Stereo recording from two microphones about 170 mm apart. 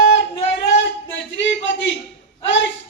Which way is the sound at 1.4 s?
90° left.